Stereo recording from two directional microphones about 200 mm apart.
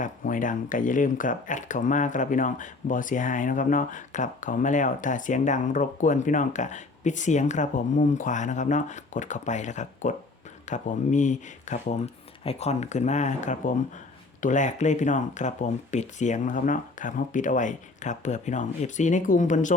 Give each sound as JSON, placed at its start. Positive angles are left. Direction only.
{"t": 0.0, "sound": "speech", "side_deg": 40}